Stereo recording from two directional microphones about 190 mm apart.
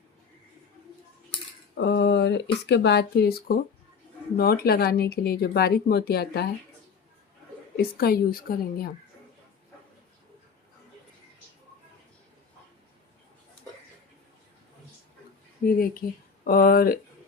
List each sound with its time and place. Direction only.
1.7 s speech: 60° left (ahead or behind)
7.8 s speech: 55° left (ahead or behind)
15.6 s speech: 50° left (ahead or behind)